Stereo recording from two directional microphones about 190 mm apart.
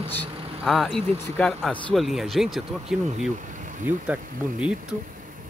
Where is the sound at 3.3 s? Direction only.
40° right (ahead or behind).